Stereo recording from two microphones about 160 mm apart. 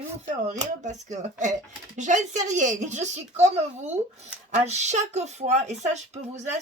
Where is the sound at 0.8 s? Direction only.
50° right (ahead or behind).